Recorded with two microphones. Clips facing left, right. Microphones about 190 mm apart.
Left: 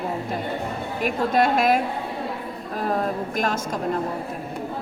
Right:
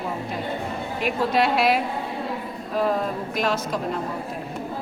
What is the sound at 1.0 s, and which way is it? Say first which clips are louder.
Speech: left 1 dB; 45° left (ahead or behind).